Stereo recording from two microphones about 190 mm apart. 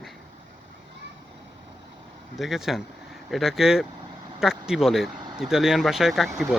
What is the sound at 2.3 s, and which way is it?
Speech, centre (ahead or behind).